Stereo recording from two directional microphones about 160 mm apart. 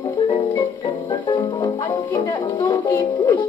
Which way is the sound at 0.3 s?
25° left (ahead or behind).